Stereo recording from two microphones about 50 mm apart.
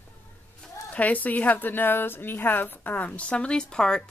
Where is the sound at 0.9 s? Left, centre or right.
Left; by 4.1 s centre.